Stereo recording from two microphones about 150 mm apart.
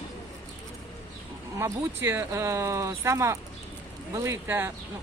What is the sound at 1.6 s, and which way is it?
Speech, 15° right (ahead or behind).